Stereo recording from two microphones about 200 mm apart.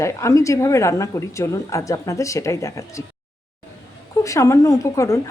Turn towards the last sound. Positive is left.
turn(degrees=15)  # may be behind; listen again after turning